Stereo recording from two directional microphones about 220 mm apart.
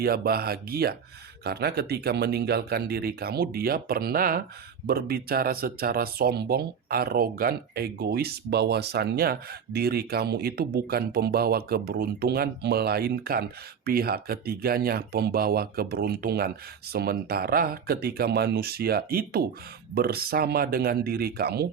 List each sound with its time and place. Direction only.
0.0 s speech: 45° right (ahead or behind)